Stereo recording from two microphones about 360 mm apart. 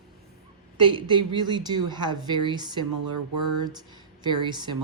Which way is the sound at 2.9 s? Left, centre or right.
Right.